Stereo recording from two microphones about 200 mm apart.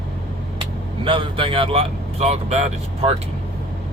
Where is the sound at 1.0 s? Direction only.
25° right (ahead or behind).